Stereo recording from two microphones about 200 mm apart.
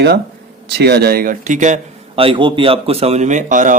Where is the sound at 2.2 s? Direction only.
25° right (ahead or behind).